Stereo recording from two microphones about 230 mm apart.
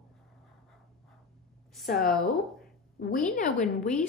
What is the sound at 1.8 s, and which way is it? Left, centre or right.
Speech, left.